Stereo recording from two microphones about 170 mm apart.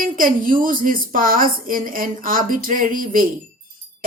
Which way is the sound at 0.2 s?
55° right (ahead or behind).